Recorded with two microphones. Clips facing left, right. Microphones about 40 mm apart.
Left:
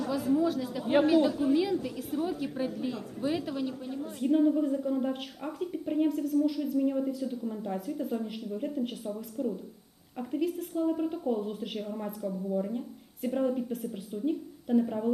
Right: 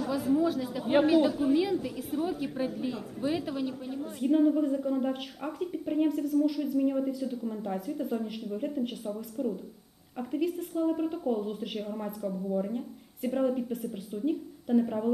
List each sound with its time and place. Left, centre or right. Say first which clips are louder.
0.0 s a woman's voice: even; centre